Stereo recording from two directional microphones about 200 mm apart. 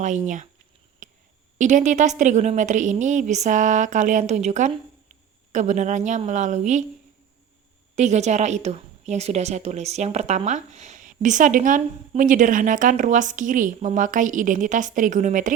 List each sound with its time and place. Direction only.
1.0 s a sound: 40° right (ahead or behind)
1.5 s a woman's voice: 40° right (ahead or behind)
7.9 s a woman's voice: 35° right (ahead or behind)